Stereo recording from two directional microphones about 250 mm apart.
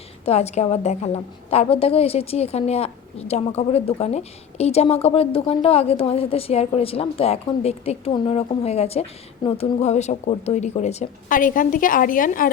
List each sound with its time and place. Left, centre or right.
0.3 s a woman's voice: left